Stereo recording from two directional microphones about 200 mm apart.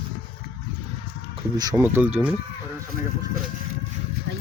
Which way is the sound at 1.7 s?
10° right (ahead or behind).